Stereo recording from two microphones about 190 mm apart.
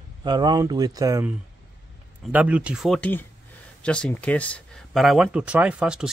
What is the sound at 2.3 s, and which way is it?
Speech, 5° right (ahead or behind).